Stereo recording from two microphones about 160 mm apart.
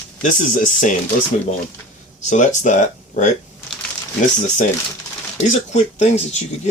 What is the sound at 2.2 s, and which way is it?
Speech, 50° left (ahead or behind).